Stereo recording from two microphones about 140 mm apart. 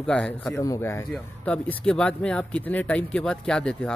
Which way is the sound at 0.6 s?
20° left (ahead or behind).